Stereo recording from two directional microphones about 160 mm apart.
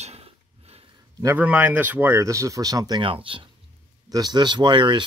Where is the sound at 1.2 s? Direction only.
10° right (ahead or behind).